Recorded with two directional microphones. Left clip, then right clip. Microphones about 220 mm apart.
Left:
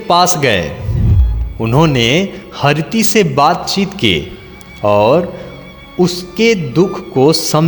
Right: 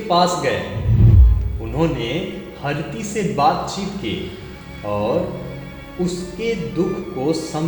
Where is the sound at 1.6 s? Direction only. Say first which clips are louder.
Left 10 dB; 50° left (ahead or behind).